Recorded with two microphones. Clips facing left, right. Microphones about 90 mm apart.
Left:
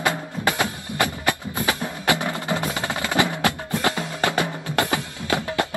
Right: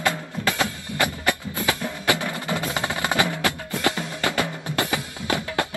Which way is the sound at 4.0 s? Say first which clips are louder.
Left 2 dB; 20° left (ahead or behind).